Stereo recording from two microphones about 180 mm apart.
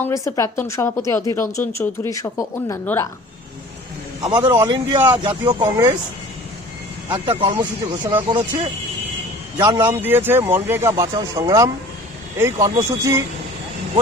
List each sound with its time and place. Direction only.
0.0 s a woman's voice: 15° left (ahead or behind)
4.2 s speech: 25° right (ahead or behind)
4.9 s speech: 15° right (ahead or behind)
5.2 s speech: 25° right (ahead or behind)
5.6 s speech: 15° right (ahead or behind)
7.1 s speech: 30° right (ahead or behind)
9.8 s speech: 10° right (ahead or behind)